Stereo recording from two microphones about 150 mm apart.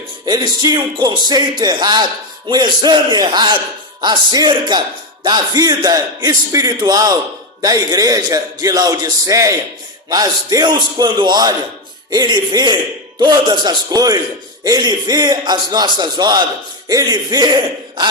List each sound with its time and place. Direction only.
0.3 s a man's voice: 25° right (ahead or behind)